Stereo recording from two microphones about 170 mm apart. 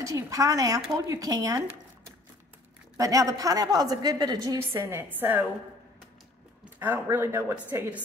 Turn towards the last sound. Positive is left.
turn(degrees=-15)  # may be behind; listen again after turning